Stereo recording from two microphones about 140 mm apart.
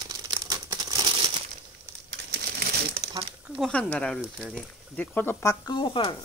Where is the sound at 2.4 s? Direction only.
90° right.